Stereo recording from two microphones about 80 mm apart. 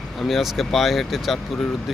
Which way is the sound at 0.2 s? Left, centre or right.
Centre.